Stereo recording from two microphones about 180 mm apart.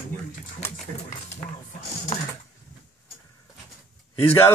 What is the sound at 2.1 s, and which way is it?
Typing, 40° left (ahead or behind).